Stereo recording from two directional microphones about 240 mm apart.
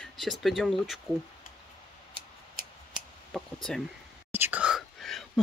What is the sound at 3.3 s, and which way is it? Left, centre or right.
Speech, centre.